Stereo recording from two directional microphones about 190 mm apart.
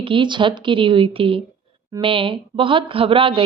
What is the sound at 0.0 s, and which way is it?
Speech, 25° right (ahead or behind).